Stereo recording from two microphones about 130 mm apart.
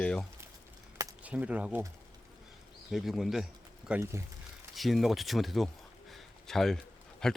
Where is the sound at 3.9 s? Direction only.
15° right (ahead or behind).